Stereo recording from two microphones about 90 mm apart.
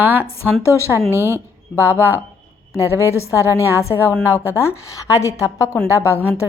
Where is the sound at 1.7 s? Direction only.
35° left (ahead or behind).